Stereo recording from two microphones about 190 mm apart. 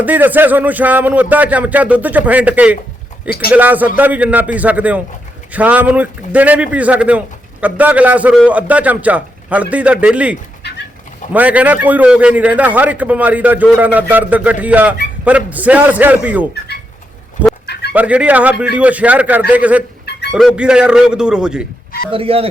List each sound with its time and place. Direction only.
0.0 s a man's voice: 10° right (ahead or behind)
3.2 s a man's voice: 55° left (ahead or behind)
3.5 s a man's voice: 10° right (ahead or behind)
11.3 s a man's voice: 10° right (ahead or behind)
17.9 s a man's voice: 5° right (ahead or behind)
22.1 s speech: 30° right (ahead or behind)